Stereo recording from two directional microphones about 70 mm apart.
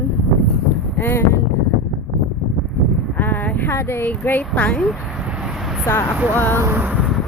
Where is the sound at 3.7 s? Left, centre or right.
Left; by 4.8 s centre.